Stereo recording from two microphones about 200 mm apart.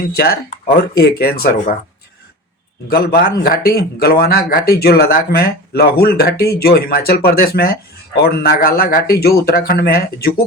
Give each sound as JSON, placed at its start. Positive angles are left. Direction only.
{"t": 0.1, "sound": "a man's voice", "side_deg": 50}
{"t": 2.9, "sound": "a man's voice", "side_deg": 50}